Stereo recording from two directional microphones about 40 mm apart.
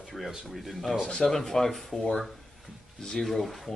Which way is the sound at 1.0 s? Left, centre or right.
Centre.